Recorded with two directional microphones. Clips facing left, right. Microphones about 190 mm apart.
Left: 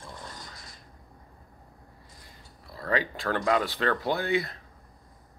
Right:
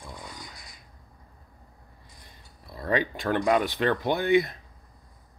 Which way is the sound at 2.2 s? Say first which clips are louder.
Right 2 dB; 20° right (ahead or behind).